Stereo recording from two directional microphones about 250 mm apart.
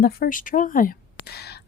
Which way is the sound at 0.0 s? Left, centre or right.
Left.